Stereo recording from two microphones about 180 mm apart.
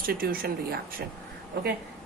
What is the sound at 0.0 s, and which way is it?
Speech, 55° right (ahead or behind).